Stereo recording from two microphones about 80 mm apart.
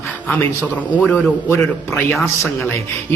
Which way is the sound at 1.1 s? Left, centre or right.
Left.